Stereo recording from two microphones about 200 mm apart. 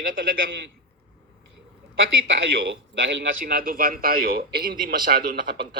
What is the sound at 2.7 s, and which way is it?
Speech, 65° right (ahead or behind).